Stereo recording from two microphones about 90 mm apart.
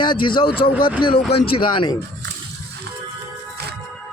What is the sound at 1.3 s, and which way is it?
Speech, 90° left.